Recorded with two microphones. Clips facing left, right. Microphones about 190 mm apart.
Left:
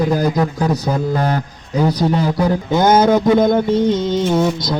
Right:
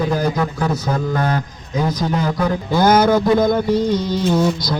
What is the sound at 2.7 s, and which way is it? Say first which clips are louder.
Mantra: left 1 dB; 20° left (ahead or behind).